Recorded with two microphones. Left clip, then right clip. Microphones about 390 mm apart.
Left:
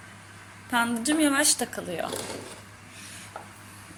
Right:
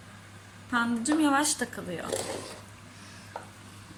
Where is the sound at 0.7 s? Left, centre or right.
Centre.